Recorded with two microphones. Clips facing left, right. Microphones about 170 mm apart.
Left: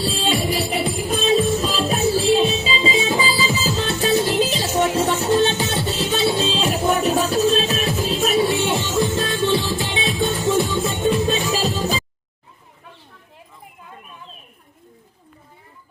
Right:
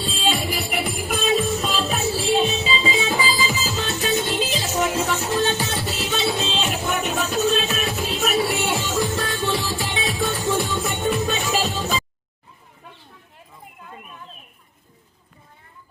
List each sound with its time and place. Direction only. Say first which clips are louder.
0.3 s music: left 1 dB; 30° left (ahead or behind)